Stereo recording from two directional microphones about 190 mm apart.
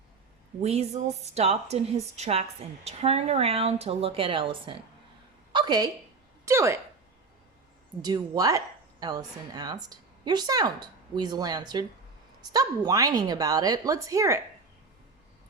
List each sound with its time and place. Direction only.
0.6 s a woman's voice: 35° right (ahead or behind)
5.5 s a sound: 25° right (ahead or behind)
6.4 s a woman's voice: 15° right (ahead or behind)
8.0 s a woman's voice: 20° right (ahead or behind)